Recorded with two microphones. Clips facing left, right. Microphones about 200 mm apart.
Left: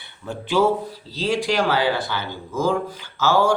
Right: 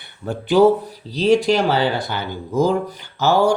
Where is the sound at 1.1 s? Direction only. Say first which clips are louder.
Right 8 dB; 20° right (ahead or behind).